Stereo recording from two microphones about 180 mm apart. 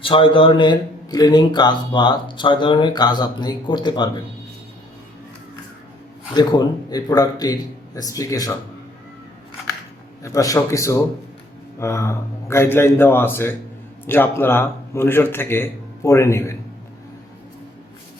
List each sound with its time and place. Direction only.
0.0 s speech: 30° left (ahead or behind)
6.3 s speech: 20° left (ahead or behind)
10.2 s a man's voice: 20° left (ahead or behind)